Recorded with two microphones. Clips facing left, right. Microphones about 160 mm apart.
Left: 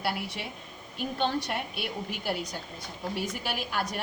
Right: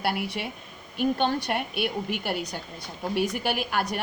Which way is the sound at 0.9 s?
65° right (ahead or behind).